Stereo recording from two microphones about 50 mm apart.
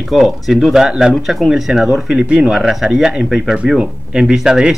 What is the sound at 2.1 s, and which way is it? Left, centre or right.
Speech, centre.